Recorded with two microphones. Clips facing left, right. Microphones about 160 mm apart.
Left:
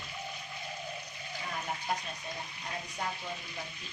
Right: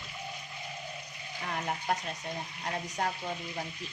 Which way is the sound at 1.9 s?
70° right (ahead or behind).